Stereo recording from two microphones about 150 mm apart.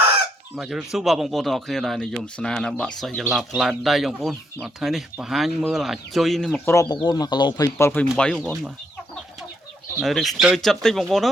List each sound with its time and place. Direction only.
0.5 s a man's voice: centre (ahead or behind)
6.7 s speech: 25° left (ahead or behind)
8.2 s a man's voice: 5° left (ahead or behind)
10.0 s a man's voice: centre (ahead or behind)